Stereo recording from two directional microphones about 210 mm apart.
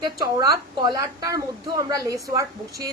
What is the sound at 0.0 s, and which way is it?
A woman's voice, 20° right (ahead or behind).